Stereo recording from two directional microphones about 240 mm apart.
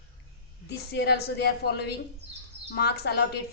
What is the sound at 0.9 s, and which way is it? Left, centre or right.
A woman's voice, left.